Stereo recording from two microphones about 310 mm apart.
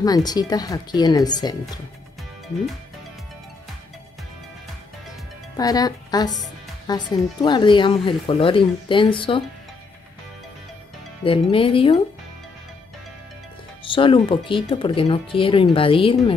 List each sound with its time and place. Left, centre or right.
0.0 s speech: centre
5.6 s speech: centre
11.5 s speech: centre
13.8 s speech: centre